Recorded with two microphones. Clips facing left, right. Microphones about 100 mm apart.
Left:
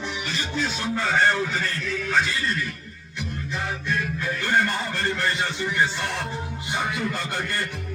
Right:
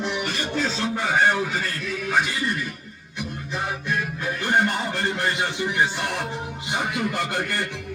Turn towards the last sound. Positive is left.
turn(degrees=-20)  # may be behind; listen again after turning